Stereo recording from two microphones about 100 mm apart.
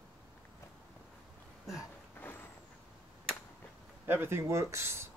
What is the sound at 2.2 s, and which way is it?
Vehicle, 20° left (ahead or behind).